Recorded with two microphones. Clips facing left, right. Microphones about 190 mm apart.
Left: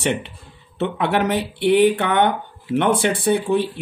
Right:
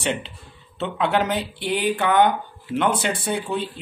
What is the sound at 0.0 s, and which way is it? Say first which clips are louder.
Speech: left 4 dB; 60° left (ahead or behind).